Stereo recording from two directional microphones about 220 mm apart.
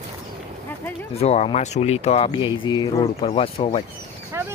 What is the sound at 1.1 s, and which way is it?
Speech, 30° left (ahead or behind).